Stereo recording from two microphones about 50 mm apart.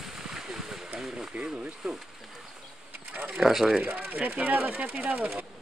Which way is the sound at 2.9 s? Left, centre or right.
Right.